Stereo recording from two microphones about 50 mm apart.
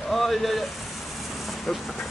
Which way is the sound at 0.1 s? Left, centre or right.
Centre.